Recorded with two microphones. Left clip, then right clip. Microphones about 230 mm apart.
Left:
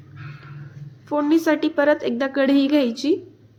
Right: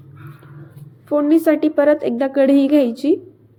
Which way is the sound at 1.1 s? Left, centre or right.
Centre.